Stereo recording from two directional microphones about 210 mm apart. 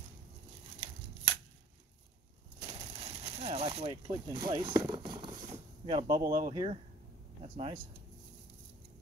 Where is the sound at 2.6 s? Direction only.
30° right (ahead or behind).